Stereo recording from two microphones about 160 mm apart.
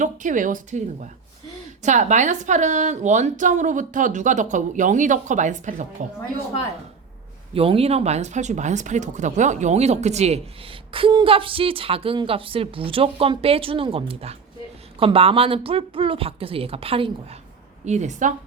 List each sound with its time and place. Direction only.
0.0 s a woman's voice: 55° right (ahead or behind)
7.5 s a woman's voice: 35° right (ahead or behind)